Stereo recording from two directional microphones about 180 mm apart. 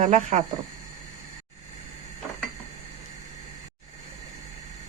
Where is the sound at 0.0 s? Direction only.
40° right (ahead or behind).